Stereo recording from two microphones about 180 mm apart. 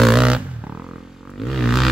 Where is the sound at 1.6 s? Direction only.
Centre (ahead or behind).